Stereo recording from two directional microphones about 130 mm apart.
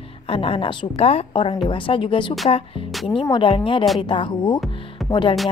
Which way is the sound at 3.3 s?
40° left (ahead or behind).